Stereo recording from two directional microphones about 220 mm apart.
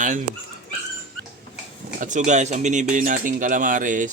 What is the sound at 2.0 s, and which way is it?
Cutlery, 35° right (ahead or behind).